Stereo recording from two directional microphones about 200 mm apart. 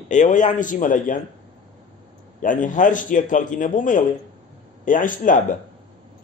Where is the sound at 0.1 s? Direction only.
40° left (ahead or behind).